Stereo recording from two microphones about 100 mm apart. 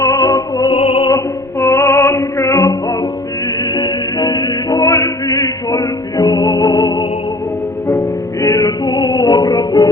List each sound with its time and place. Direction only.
0.0 s music: 35° left (ahead or behind)
0.7 s music: 70° left (ahead or behind)
1.1 s music: 25° left (ahead or behind); by 7.1 s 45° left (ahead or behind)
7.9 s music: 30° left (ahead or behind)